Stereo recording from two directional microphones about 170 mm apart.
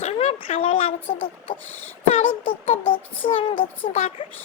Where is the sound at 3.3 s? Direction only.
30° left (ahead or behind).